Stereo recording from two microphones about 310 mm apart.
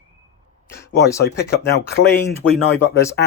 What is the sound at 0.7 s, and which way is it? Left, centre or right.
Speech, centre.